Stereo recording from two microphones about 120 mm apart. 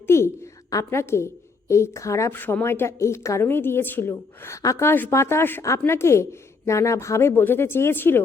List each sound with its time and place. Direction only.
0.7 s a woman's voice: 25° left (ahead or behind)